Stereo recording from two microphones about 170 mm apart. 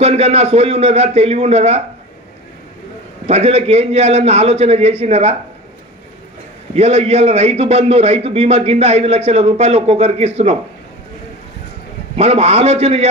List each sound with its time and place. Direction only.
0.0 s a man's voice: 35° right (ahead or behind)
3.3 s a man's voice: 35° right (ahead or behind)
6.7 s a man's voice: 35° right (ahead or behind)
12.2 s a man's voice: 35° right (ahead or behind)